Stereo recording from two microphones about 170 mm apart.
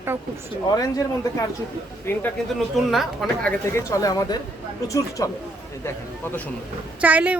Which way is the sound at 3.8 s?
20° left (ahead or behind).